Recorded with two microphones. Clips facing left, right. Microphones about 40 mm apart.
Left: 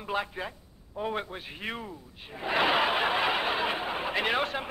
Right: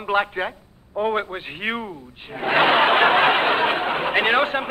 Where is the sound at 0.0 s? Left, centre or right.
Right.